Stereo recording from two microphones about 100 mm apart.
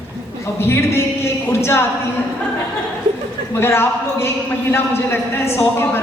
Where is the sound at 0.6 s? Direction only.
25° left (ahead or behind).